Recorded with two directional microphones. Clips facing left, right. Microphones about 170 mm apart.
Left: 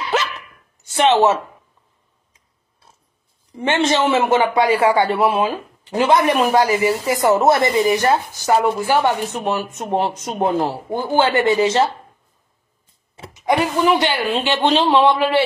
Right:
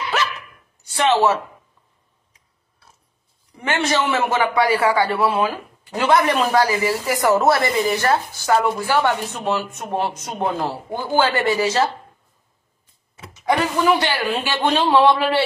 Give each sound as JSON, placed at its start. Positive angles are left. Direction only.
{"t": 0.9, "sound": "a man's voice", "side_deg": 20}
{"t": 3.5, "sound": "a man's voice", "side_deg": 25}
{"t": 13.3, "sound": "a man's voice", "side_deg": 15}